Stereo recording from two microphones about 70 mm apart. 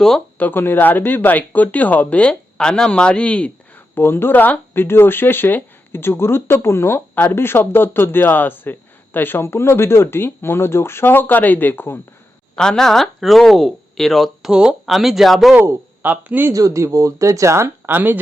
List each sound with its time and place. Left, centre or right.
0.3 s speech: left
3.9 s speech: left
12.5 s speech: centre
14.5 s speech: centre
16.0 s speech: right
16.5 s speech: right